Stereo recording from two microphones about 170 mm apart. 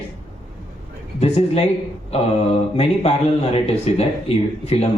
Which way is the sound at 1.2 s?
35° left (ahead or behind).